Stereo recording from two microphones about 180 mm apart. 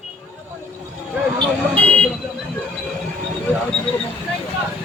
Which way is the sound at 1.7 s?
5° left (ahead or behind).